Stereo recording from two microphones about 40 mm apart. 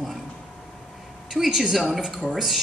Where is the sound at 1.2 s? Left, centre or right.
Centre.